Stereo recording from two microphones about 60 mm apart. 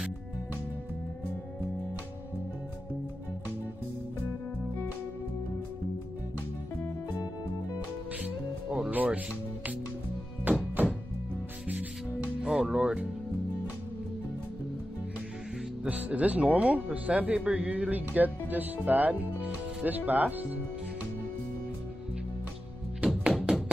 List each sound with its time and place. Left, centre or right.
8.2 s music: right
8.9 s speech: right
10.5 s music: right
12.4 s music: centre
15.9 s speech: right
22.9 s music: centre